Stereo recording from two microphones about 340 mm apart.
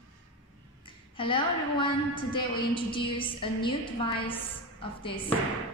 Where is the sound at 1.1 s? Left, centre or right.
Centre.